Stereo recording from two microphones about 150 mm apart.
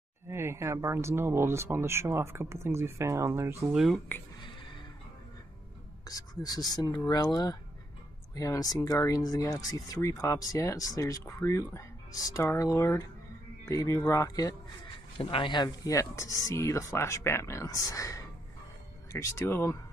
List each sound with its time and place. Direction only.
0.3 s speech: 15° right (ahead or behind)
3.7 s speech: centre (ahead or behind)
6.0 s speech: 25° left (ahead or behind)
15.1 s speech: 35° left (ahead or behind); by 19.8 s 15° left (ahead or behind)